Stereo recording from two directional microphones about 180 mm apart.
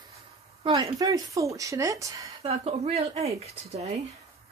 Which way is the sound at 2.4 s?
35° right (ahead or behind).